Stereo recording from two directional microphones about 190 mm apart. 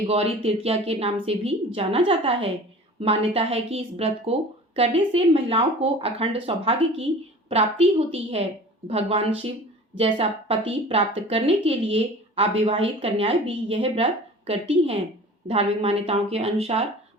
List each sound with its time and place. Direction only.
0.1 s speech: 30° right (ahead or behind)